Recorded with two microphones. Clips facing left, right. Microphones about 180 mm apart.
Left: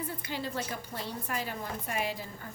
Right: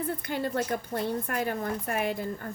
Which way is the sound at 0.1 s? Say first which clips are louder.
Right 6 dB; 55° right (ahead or behind).